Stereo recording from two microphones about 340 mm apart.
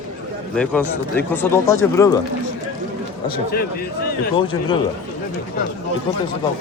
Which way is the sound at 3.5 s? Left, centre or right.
Left.